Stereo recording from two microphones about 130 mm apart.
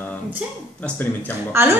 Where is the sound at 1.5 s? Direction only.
20° right (ahead or behind).